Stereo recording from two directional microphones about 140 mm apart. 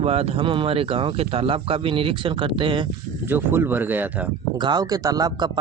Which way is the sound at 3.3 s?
15° right (ahead or behind).